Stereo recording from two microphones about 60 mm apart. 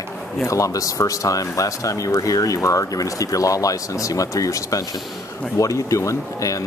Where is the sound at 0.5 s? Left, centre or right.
Left.